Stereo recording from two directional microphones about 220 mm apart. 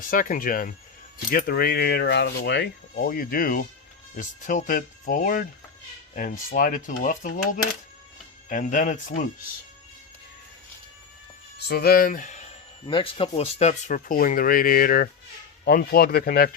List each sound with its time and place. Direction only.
0.1 s speech: 40° left (ahead or behind)
11.7 s speech: 45° left (ahead or behind)